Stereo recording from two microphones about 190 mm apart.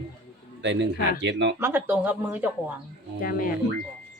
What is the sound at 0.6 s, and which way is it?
Speech, 70° right (ahead or behind).